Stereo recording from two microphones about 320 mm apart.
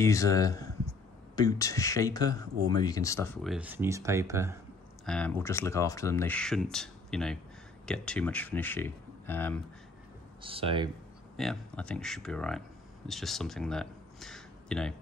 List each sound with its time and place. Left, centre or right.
0.0 s speech: centre
3.4 s speech: centre
5.0 s speech: centre
10.4 s speech: centre
11.3 s speech: centre